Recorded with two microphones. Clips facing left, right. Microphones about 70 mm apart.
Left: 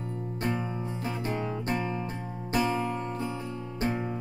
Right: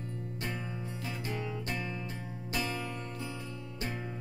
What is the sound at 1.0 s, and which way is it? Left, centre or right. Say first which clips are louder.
Music: left 6 dB; left.